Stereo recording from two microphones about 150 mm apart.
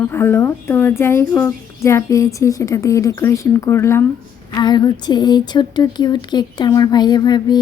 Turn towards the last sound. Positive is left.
turn(degrees=25)  # may be behind; listen again after turning